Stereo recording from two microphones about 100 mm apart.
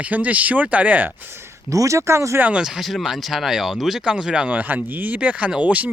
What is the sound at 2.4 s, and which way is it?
Speech, 10° right (ahead or behind).